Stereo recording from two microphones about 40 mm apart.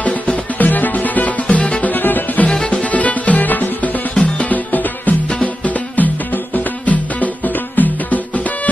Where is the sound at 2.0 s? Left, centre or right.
Left.